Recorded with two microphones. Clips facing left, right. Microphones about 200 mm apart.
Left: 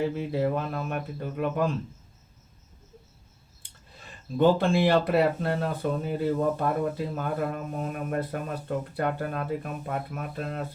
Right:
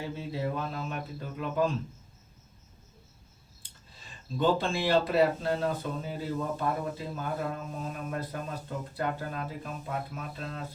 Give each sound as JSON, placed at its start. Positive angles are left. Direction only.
{"t": 0.2, "sound": "speech", "side_deg": 60}
{"t": 4.4, "sound": "speech", "side_deg": 60}